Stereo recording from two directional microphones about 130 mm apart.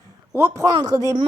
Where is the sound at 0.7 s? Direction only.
35° right (ahead or behind).